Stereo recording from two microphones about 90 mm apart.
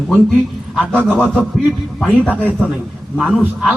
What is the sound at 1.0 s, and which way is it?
Speech, 15° right (ahead or behind).